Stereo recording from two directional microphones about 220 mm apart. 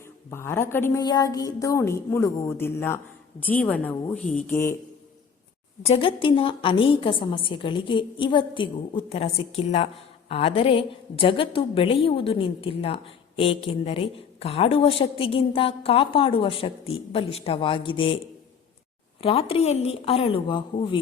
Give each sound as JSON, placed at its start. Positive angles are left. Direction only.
{"t": 0.3, "sound": "a woman's voice", "side_deg": 10}
{"t": 5.8, "sound": "a woman's voice", "side_deg": 25}
{"t": 19.2, "sound": "a woman's voice", "side_deg": 25}